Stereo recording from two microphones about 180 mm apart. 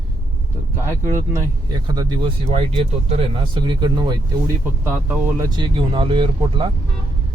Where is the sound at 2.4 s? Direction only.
35° right (ahead or behind).